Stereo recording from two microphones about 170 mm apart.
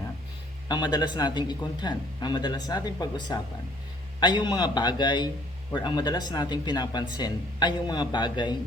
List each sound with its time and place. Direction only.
0.7 s speech: 25° left (ahead or behind)